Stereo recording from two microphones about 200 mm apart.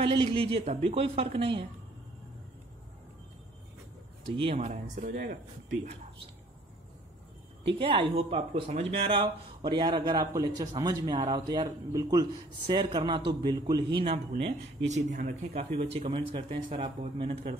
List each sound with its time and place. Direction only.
0.0 s speech: 25° right (ahead or behind)
4.6 s speech: 40° right (ahead or behind)
7.8 s speech: 25° right (ahead or behind)
14.4 s speech: 35° right (ahead or behind)
15.7 s speech: 30° right (ahead or behind)